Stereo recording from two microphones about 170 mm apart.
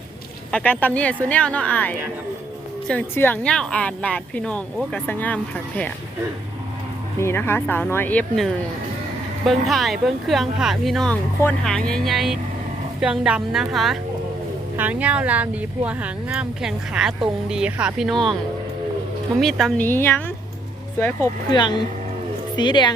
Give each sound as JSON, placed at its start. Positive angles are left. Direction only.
{"t": 0.5, "sound": "speech", "side_deg": 10}
{"t": 7.2, "sound": "speech", "side_deg": 15}
{"t": 19.4, "sound": "speech", "side_deg": 0}
{"t": 21.5, "sound": "a woman's voice", "side_deg": 25}